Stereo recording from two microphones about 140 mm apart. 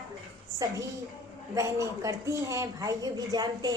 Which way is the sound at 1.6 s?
20° right (ahead or behind).